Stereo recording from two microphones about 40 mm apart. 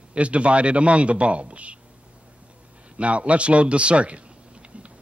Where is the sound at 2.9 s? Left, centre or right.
Right.